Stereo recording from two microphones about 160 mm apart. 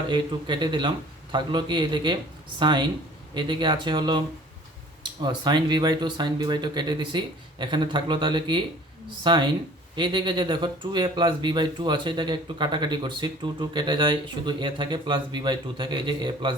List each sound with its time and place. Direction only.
0.1 s speech: 30° right (ahead or behind)
5.2 s speech: 25° right (ahead or behind)